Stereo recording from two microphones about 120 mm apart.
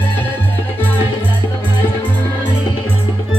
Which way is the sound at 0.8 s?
15° left (ahead or behind).